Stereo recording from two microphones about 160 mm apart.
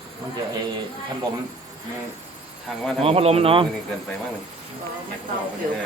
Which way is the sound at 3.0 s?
35° right (ahead or behind).